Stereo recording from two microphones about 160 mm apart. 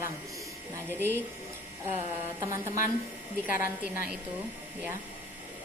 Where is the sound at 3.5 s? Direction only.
55° left (ahead or behind).